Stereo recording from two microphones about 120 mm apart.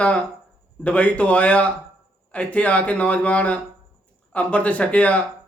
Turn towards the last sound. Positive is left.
turn(degrees=10)  # may be behind; listen again after turning